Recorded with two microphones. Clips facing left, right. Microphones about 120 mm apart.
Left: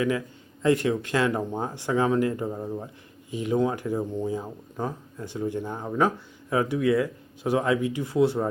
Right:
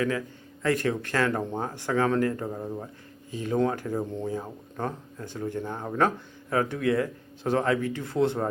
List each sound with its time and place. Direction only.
0.6 s speech: 20° left (ahead or behind)